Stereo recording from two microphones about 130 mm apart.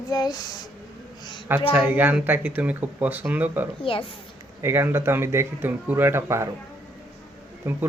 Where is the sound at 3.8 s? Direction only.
45° left (ahead or behind).